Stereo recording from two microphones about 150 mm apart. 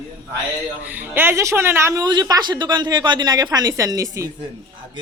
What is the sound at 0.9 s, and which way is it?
A woman's voice, 10° right (ahead or behind).